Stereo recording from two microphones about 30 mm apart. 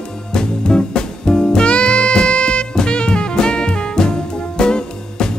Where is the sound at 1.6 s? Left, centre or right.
Left.